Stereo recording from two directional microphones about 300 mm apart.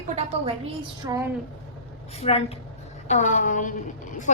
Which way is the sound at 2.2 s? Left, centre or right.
Left.